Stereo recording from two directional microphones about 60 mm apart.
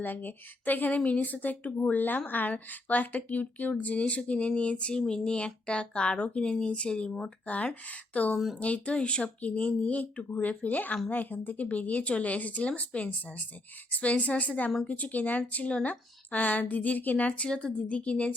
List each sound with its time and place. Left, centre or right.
0.0 s speech: left